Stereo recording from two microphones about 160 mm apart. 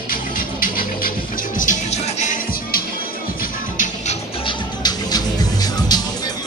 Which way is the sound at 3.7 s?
50° left (ahead or behind).